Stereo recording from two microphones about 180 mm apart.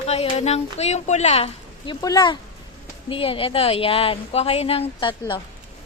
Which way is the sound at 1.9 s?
20° left (ahead or behind).